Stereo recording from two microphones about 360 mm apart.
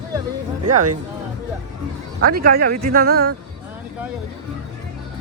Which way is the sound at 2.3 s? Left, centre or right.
Right.